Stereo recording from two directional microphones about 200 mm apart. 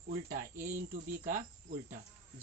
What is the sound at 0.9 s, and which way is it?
Cricket, 40° right (ahead or behind).